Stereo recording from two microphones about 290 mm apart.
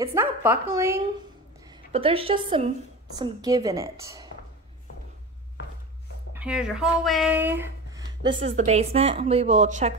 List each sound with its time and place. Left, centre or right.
0.0 s speech: centre
1.9 s a woman's voice: centre
6.3 s speech: centre; by 9.9 s right